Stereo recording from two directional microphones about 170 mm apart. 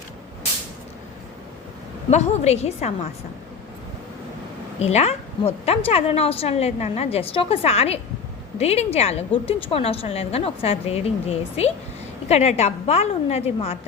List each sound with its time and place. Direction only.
2.0 s a woman's voice: 40° left (ahead or behind)
4.8 s a woman's voice: 40° left (ahead or behind)